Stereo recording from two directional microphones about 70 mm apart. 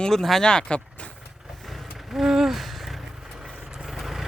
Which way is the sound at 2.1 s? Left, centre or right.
Centre.